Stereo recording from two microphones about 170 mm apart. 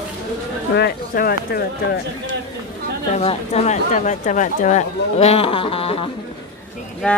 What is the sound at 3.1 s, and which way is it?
Speech, 40° left (ahead or behind).